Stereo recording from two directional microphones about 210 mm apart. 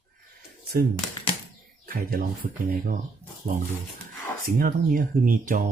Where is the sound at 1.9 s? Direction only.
45° right (ahead or behind).